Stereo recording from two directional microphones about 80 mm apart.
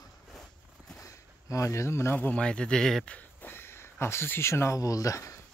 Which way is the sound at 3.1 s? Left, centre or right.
Left.